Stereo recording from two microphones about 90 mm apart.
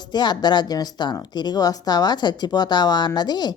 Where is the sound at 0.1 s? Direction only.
55° left (ahead or behind).